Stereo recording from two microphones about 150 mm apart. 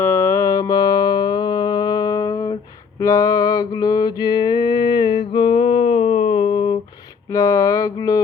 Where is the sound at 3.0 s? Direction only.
25° left (ahead or behind).